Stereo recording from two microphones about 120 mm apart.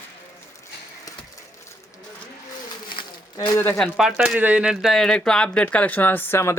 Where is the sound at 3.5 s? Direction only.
20° left (ahead or behind).